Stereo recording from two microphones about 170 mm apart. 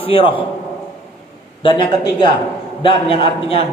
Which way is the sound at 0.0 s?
30° left (ahead or behind).